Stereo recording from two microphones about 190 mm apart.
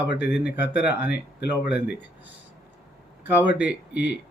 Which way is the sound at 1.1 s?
60° left (ahead or behind).